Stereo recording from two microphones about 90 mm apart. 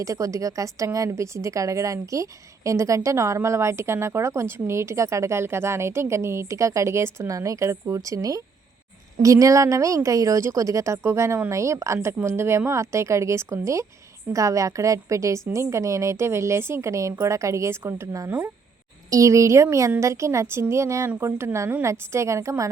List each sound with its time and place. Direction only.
0.0 s a woman's voice: 35° right (ahead or behind)
18.3 s speech: 25° right (ahead or behind)
19.1 s a woman's voice: 35° right (ahead or behind)